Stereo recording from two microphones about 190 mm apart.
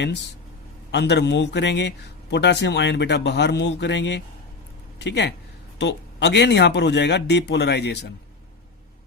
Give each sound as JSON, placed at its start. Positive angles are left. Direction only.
{"t": 0.9, "sound": "speech", "side_deg": 65}